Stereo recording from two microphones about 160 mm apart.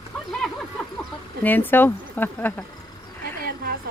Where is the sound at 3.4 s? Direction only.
70° right (ahead or behind).